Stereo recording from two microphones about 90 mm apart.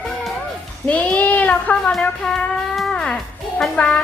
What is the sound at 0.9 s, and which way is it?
Child singing, 15° left (ahead or behind).